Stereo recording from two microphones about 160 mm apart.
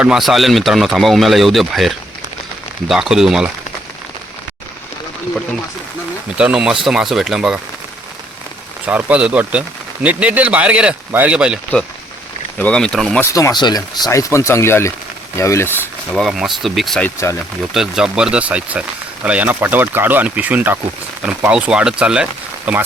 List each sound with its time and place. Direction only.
0.0 s speech: centre (ahead or behind)
6.3 s speech: 5° right (ahead or behind)
8.9 s speech: 10° right (ahead or behind)
12.5 s speech: 5° left (ahead or behind)
13.3 s speech: 25° left (ahead or behind)
16.1 s speech: centre (ahead or behind)
17.2 s speech: 15° left (ahead or behind)
17.7 s speech: 5° right (ahead or behind)